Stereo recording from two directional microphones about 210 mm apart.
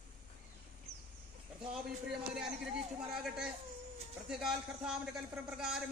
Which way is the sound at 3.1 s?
5° right (ahead or behind).